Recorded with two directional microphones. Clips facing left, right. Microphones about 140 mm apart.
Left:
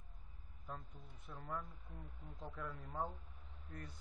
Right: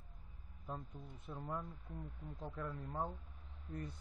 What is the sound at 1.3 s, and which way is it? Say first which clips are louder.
Speech: right 2 dB; 20° right (ahead or behind).